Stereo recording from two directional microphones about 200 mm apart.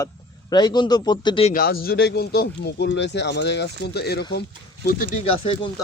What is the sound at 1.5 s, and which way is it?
Speech, 50° left (ahead or behind).